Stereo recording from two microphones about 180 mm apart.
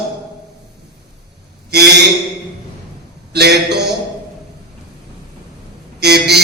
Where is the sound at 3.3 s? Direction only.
65° right (ahead or behind).